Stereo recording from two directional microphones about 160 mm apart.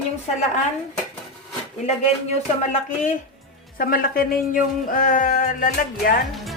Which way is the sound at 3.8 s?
65° left (ahead or behind).